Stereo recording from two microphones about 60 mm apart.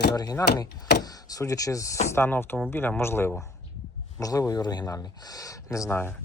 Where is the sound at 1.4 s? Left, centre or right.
Left.